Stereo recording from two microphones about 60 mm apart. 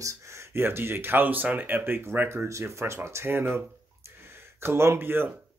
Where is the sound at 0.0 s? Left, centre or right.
Right.